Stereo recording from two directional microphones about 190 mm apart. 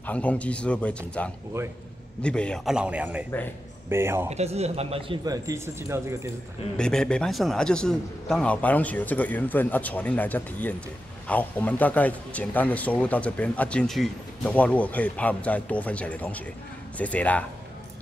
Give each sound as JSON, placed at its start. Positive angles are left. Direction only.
{"t": 0.0, "sound": "a man's voice", "side_deg": 5}
{"t": 4.3, "sound": "speech", "side_deg": -35}
{"t": 6.8, "sound": "a man's voice", "side_deg": 5}